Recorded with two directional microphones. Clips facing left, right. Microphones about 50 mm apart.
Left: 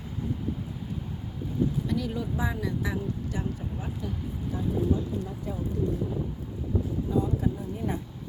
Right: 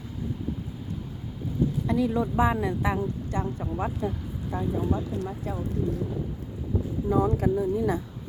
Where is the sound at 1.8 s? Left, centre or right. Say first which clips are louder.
Right 5 dB; right.